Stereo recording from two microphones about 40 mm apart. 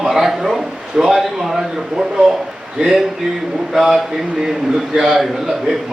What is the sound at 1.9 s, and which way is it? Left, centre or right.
Speech, centre.